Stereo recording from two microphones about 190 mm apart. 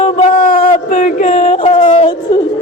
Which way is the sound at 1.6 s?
25° left (ahead or behind).